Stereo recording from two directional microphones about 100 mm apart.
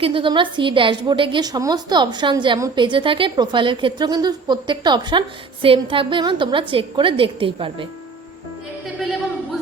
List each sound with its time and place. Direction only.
0.0 s a woman's voice: 60° right (ahead or behind)
1.5 s a woman's voice: 40° right (ahead or behind)
5.6 s a woman's voice: 65° right (ahead or behind)